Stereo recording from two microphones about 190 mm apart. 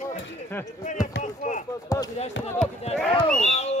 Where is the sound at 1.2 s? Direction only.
40° left (ahead or behind).